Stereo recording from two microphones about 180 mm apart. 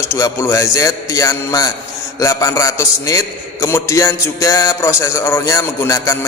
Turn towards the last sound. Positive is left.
turn(degrees=15)  # may be behind; listen again after turning